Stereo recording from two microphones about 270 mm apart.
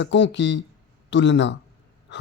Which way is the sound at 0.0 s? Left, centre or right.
Left.